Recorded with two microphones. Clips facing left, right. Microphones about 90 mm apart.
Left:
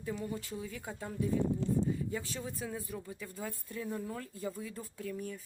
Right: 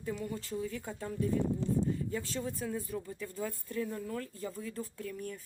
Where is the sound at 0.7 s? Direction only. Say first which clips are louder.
Right 2 dB; 10° left (ahead or behind).